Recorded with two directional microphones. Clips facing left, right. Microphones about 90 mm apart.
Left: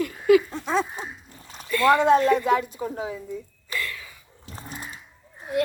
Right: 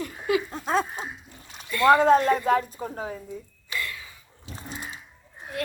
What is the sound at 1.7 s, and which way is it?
Speech, 25° right (ahead or behind).